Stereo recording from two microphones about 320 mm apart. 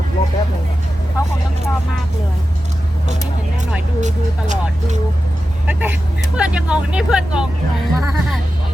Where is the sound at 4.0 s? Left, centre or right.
Right.